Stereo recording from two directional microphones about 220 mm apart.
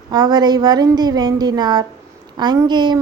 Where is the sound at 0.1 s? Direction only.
20° right (ahead or behind).